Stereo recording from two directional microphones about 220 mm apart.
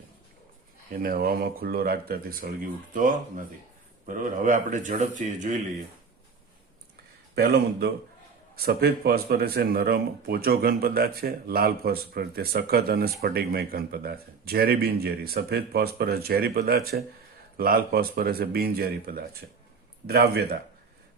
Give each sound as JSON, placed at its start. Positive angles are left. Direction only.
{"t": 0.9, "sound": "speech", "side_deg": -40}
{"t": 7.3, "sound": "speech", "side_deg": -45}